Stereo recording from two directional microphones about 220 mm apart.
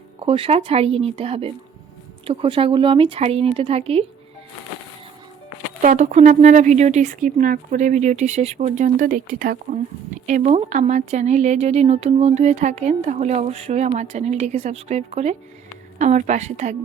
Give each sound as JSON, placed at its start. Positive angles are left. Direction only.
{"t": 0.3, "sound": "speech", "side_deg": -25}
{"t": 5.8, "sound": "speech", "side_deg": -35}